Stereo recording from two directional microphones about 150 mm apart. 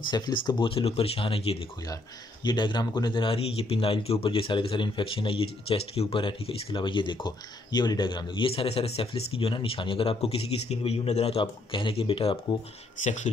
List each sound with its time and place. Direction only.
0.1 s speech: 30° left (ahead or behind)
13.0 s speech: 55° left (ahead or behind)